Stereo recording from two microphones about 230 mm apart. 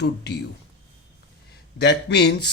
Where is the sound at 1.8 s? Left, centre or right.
Left.